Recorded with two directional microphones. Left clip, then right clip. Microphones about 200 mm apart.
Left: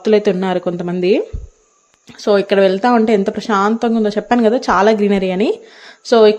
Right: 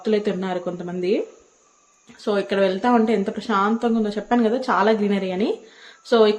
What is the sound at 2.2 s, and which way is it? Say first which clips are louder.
Speech: left 8 dB; 40° left (ahead or behind).